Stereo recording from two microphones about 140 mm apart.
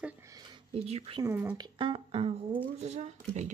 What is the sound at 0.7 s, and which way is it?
Speech, 45° right (ahead or behind).